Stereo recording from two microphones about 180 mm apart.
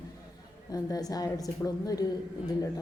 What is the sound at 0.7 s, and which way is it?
A woman's voice, 20° left (ahead or behind).